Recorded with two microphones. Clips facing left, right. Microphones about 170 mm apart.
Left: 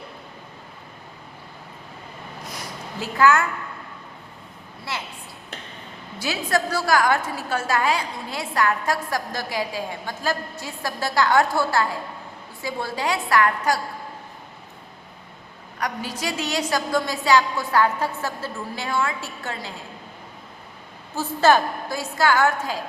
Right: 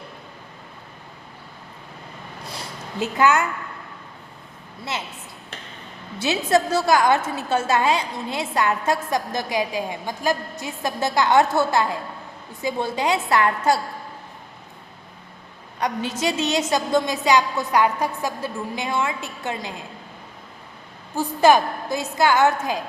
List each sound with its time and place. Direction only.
2.4 s a sound: 30° right (ahead or behind)
4.9 s a woman's voice: 20° right (ahead or behind)
6.1 s a woman's voice: 25° right (ahead or behind)
15.8 s a woman's voice: 25° right (ahead or behind)
21.2 s a woman's voice: 15° right (ahead or behind)